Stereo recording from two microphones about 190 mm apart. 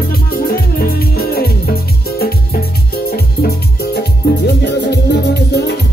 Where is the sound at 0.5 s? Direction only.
55° left (ahead or behind).